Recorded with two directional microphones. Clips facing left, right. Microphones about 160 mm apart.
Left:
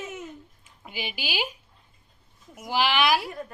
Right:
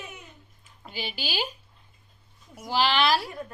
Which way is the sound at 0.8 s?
15° left (ahead or behind).